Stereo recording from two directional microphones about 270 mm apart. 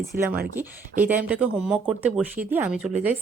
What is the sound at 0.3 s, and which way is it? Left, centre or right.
Speech, right.